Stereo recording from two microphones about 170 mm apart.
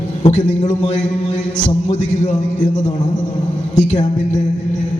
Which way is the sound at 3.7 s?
35° left (ahead or behind).